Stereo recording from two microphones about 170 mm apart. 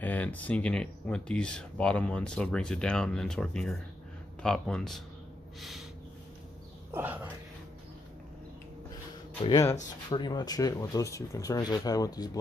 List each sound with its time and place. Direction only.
0.0 s speech: 10° left (ahead or behind)
6.9 s speech: 10° right (ahead or behind)
9.5 s speech: 20° left (ahead or behind)